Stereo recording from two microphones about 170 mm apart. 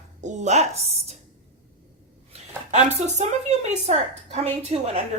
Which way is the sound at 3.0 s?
40° right (ahead or behind).